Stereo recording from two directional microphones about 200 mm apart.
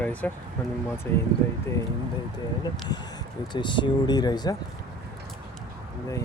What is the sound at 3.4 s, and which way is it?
Speech, 20° left (ahead or behind).